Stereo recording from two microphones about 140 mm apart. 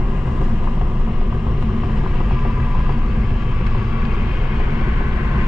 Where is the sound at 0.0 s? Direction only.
5° right (ahead or behind).